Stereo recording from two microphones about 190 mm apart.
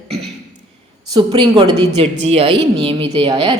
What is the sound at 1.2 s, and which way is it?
A woman's voice, 25° right (ahead or behind).